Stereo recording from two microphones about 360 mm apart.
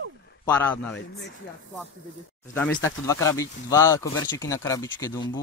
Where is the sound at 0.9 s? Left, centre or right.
Left.